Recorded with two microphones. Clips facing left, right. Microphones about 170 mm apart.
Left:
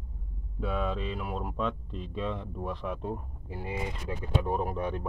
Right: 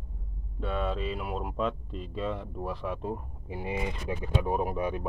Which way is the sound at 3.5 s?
15° right (ahead or behind).